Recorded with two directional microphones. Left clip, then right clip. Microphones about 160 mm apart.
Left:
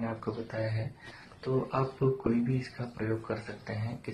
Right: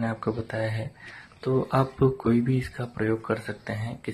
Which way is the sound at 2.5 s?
35° right (ahead or behind).